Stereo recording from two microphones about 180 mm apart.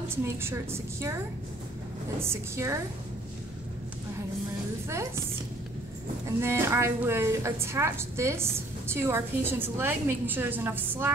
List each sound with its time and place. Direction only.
0.4 s a woman's voice: 15° right (ahead or behind)
4.8 s a woman's voice: 15° right (ahead or behind)
6.2 s a woman's voice: 15° right (ahead or behind)